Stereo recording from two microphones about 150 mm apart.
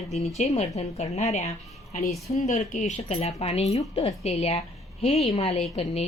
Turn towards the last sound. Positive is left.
turn(degrees=40)  # may be behind; listen again after turning